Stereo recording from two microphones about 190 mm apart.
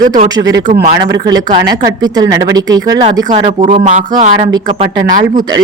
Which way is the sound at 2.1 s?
20° right (ahead or behind).